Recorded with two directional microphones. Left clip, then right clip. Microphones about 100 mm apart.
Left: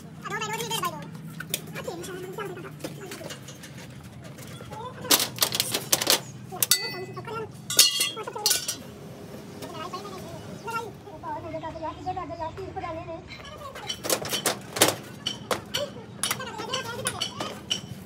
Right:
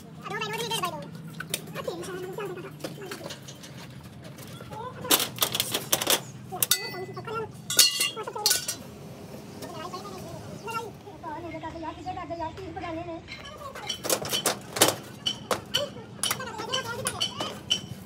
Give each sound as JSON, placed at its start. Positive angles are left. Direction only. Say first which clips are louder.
{"t": 0.2, "sound": "gargling", "louder": "left 1 dB", "side_deg": 35}
{"t": 1.4, "sound": "scissors", "louder": "even", "side_deg": 0}
{"t": 5.0, "sound": "typewriter", "louder": "left 2 dB", "side_deg": 5}
{"t": 9.6, "sound": "vehicle", "louder": "left 2 dB", "side_deg": 0}
{"t": 11.6, "sound": "a sound", "louder": "left 3 dB", "side_deg": 80}
{"t": 13.7, "sound": "a sound", "louder": "even", "side_deg": 0}